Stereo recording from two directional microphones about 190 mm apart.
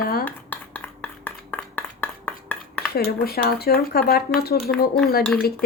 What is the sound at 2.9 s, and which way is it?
Speech, 55° left (ahead or behind).